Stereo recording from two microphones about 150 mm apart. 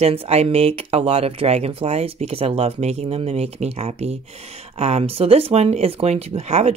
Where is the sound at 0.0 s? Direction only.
40° right (ahead or behind).